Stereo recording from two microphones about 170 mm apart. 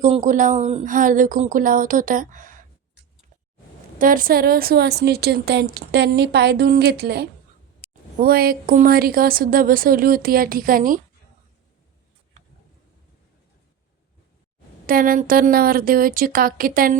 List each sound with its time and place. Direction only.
0.0 s speech: 45° right (ahead or behind)
3.9 s a woman's voice: 55° right (ahead or behind)
14.8 s a woman's voice: 55° right (ahead or behind)